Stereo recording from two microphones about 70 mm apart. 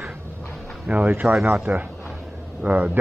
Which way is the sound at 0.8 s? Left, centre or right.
Right.